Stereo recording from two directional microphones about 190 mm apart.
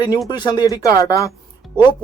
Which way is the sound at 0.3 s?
20° left (ahead or behind).